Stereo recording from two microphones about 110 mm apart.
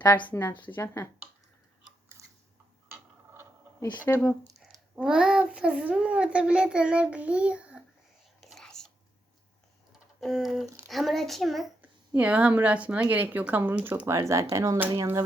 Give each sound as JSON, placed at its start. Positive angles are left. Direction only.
{"t": 0.3, "sound": "speech", "side_deg": 20}
{"t": 2.2, "sound": "a sound", "side_deg": -30}
{"t": 3.9, "sound": "speech", "side_deg": 15}
{"t": 4.9, "sound": "a child's voice", "side_deg": -10}
{"t": 8.4, "sound": "whispering", "side_deg": 0}
{"t": 10.2, "sound": "a woman's voice", "side_deg": 0}
{"t": 11.8, "sound": "a child's voice", "side_deg": -15}
{"t": 14.1, "sound": "speech", "side_deg": -30}